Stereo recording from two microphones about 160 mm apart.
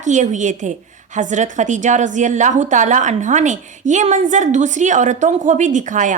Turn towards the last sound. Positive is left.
turn(degrees=-50)  # may be behind; listen again after turning